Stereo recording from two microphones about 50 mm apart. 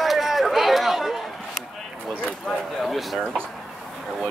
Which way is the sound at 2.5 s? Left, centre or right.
Centre.